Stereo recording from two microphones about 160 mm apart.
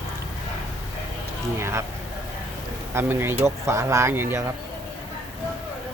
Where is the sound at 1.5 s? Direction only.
15° right (ahead or behind).